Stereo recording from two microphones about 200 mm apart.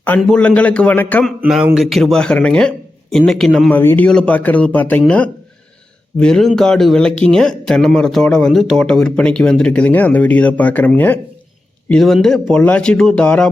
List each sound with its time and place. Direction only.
0.0 s a man's voice: 5° left (ahead or behind)
1.4 s speech: 5° right (ahead or behind)